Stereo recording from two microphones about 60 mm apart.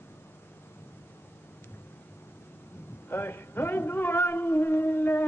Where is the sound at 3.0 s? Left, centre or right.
Left.